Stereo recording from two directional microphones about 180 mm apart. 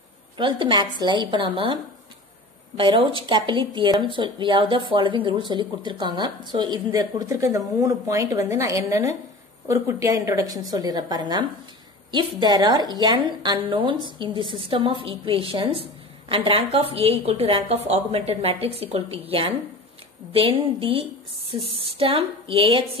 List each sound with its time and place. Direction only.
0.4 s a woman's voice: 25° right (ahead or behind)
2.8 s a woman's voice: 30° right (ahead or behind)